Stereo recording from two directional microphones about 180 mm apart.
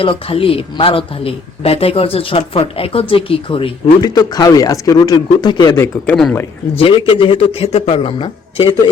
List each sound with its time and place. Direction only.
0.0 s speech: 30° left (ahead or behind)
6.7 s speech: 30° left (ahead or behind)